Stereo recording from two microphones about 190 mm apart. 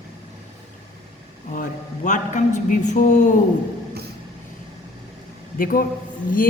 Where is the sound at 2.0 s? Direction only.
40° left (ahead or behind).